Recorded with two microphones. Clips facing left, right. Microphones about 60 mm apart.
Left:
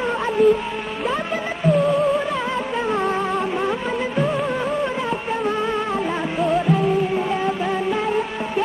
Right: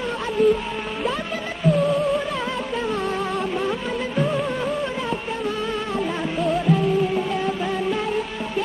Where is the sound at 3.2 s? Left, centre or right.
Centre.